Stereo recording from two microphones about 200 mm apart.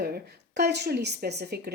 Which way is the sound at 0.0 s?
50° right (ahead or behind).